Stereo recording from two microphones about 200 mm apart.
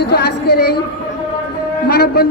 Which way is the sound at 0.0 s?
55° left (ahead or behind).